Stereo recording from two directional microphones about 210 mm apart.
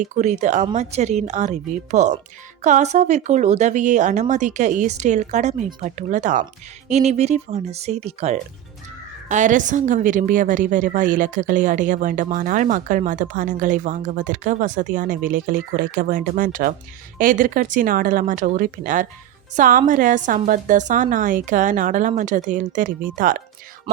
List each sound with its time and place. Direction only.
0.0 s a woman's voice: 35° right (ahead or behind)